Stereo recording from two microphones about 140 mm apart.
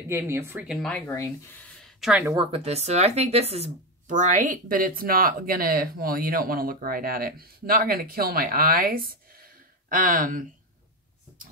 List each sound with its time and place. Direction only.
0.1 s speech: 15° right (ahead or behind)
0.8 s speech: 10° left (ahead or behind)
1.1 s speech: 20° left (ahead or behind)
1.9 s a sound: 5° right (ahead or behind)
2.3 s speech: 45° right (ahead or behind); by 10.4 s 70° right (ahead or behind)